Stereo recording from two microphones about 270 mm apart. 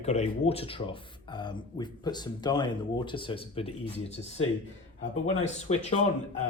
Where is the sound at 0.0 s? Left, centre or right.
Left.